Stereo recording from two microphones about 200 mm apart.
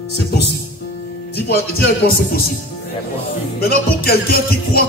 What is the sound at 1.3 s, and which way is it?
Music, 50° left (ahead or behind).